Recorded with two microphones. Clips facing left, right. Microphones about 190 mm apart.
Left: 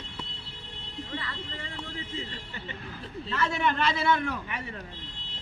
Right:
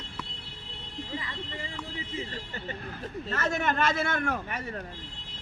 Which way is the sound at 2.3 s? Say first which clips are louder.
Right 3 dB; 40° right (ahead or behind).